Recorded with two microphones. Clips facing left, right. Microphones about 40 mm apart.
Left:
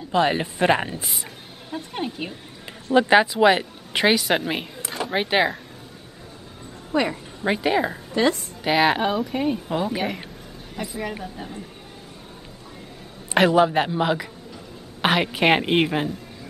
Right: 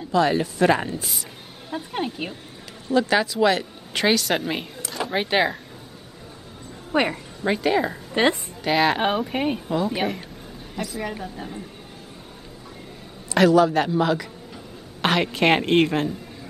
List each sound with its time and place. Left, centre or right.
0.1 s a woman's voice: left
1.7 s a woman's voice: centre
2.9 s a woman's voice: left; by 5.6 s centre
6.9 s a woman's voice: right
7.4 s a woman's voice: centre
8.1 s a woman's voice: right
8.6 s a woman's voice: centre
9.0 s speech: right
11.0 s a woman's voice: centre
13.3 s a man's voice: left; by 16.1 s centre